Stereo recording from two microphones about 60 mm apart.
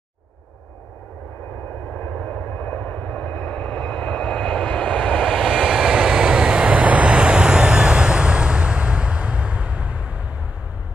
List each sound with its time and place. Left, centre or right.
2.0 s vehicle: left; by 5.9 s centre
5.9 s vehicle: centre